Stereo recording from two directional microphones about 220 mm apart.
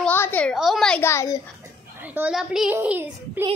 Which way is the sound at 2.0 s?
5° right (ahead or behind).